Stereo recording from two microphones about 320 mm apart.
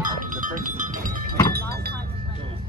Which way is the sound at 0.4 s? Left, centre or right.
Right.